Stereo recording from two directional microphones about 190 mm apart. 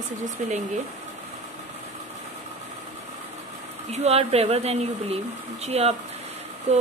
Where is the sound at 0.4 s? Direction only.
40° right (ahead or behind).